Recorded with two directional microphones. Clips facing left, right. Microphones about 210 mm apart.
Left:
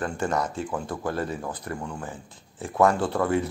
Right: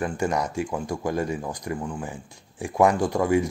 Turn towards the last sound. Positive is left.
turn(degrees=-10)  # may be behind; listen again after turning